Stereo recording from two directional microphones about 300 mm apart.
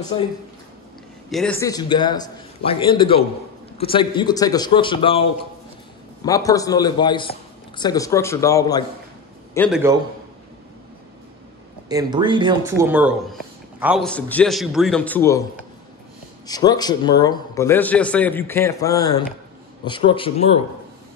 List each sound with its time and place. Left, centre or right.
1.3 s a man's voice: centre
9.7 s a man's voice: centre
11.9 s speech: centre
16.4 s a man's voice: centre